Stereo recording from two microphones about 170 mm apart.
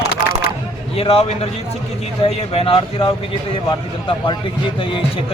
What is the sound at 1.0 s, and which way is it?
Speech, 35° left (ahead or behind).